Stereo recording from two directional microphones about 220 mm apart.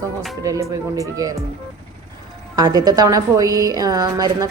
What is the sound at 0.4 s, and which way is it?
Speech, 15° right (ahead or behind).